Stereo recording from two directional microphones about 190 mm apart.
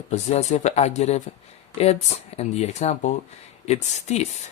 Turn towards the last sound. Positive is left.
turn(degrees=35)  # may be behind; listen again after turning